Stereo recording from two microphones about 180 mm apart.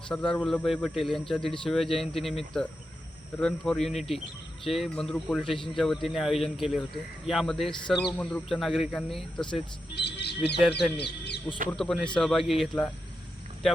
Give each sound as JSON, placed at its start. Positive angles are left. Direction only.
{"t": 0.1, "sound": "speech", "side_deg": 5}
{"t": 9.9, "sound": "speech", "side_deg": 70}
{"t": 10.7, "sound": "speech", "side_deg": 0}
{"t": 10.9, "sound": "speech", "side_deg": 70}
{"t": 11.8, "sound": "speech", "side_deg": 0}